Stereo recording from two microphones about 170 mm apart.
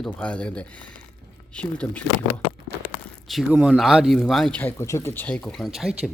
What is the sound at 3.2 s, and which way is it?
Speech, centre (ahead or behind).